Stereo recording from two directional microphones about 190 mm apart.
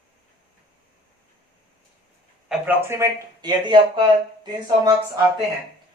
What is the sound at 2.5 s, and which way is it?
Speech, 10° right (ahead or behind).